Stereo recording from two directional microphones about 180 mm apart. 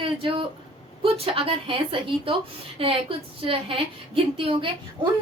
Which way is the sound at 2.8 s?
30° right (ahead or behind).